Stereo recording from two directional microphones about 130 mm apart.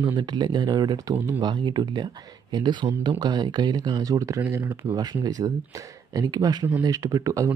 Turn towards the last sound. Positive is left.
turn(degrees=-25)  # may be behind; listen again after turning